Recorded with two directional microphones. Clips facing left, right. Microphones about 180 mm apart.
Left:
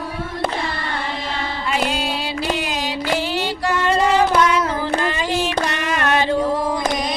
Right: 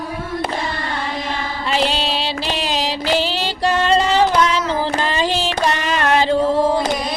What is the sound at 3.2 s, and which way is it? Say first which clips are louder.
Female singing: right 2 dB; 30° right (ahead or behind).